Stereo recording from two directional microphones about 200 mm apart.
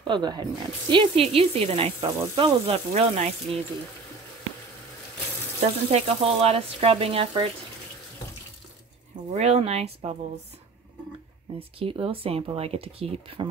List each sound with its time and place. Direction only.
0.0 s speech: 20° right (ahead or behind)
5.9 s speech: 30° right (ahead or behind)
9.1 s speech: 35° right (ahead or behind)
11.8 s speech: 25° right (ahead or behind)